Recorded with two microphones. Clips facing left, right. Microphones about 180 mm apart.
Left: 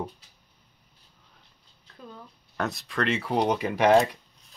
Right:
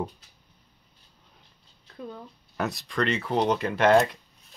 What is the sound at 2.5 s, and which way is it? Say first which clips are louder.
Speech: right 1 dB; centre (ahead or behind).